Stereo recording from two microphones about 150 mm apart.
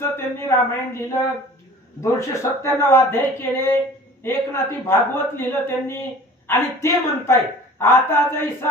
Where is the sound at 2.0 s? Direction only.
20° left (ahead or behind).